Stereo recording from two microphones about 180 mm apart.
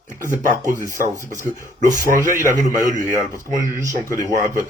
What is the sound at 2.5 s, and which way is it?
A man's voice, 45° right (ahead or behind).